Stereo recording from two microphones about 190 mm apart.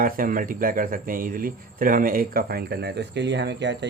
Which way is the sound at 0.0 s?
45° right (ahead or behind).